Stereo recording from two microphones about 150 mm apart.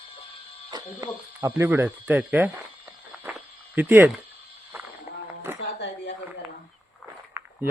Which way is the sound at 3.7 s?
15° right (ahead or behind).